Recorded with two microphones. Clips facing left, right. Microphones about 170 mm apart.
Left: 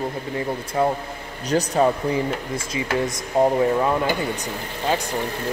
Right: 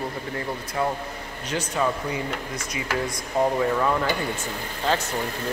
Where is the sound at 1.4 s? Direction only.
35° left (ahead or behind).